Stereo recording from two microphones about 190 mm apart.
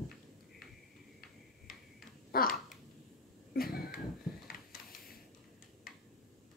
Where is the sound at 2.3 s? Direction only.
50° left (ahead or behind).